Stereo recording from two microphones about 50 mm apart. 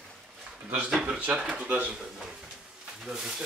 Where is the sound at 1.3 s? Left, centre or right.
Centre.